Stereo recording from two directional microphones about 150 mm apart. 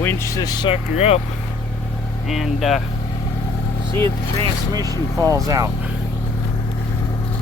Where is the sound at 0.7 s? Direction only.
45° left (ahead or behind).